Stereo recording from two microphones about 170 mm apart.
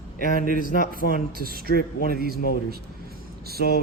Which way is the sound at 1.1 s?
60° right (ahead or behind).